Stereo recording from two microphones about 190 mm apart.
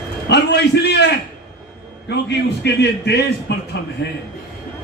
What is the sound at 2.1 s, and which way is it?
A man's voice, 65° left (ahead or behind).